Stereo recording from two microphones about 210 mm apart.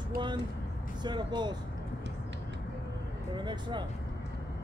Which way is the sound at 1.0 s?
20° right (ahead or behind).